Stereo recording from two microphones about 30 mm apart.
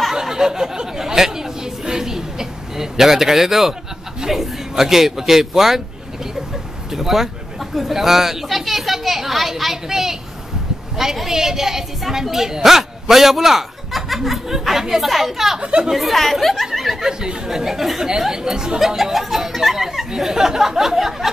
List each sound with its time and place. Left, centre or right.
0.1 s chatter: centre
4.3 s a man's voice: centre
6.9 s speech: centre
16.7 s speech: centre
18.3 s speech: right
19.1 s speech: centre